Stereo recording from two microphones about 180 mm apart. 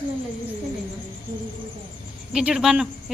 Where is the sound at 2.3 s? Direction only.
5° right (ahead or behind).